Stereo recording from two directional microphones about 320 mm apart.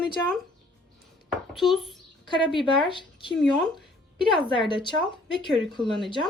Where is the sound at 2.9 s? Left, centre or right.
Centre.